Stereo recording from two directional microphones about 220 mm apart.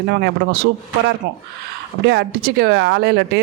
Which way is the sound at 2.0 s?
50° right (ahead or behind).